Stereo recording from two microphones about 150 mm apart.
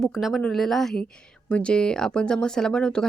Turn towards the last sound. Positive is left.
turn(degrees=5)  # may be behind; listen again after turning